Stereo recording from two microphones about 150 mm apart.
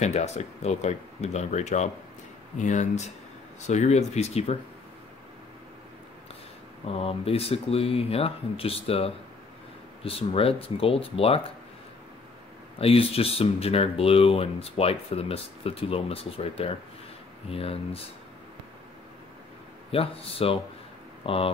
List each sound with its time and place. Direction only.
0.0 s speech: 50° left (ahead or behind)
6.9 s speech: 40° left (ahead or behind)
12.7 s speech: 40° left (ahead or behind)
19.9 s speech: 40° left (ahead or behind)